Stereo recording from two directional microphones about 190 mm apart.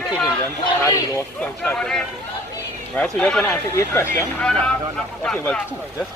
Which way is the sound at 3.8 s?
15° left (ahead or behind).